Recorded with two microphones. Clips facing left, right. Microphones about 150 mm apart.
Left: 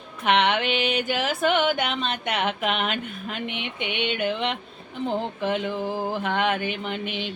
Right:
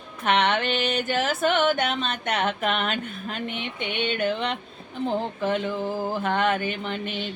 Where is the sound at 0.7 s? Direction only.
45° right (ahead or behind).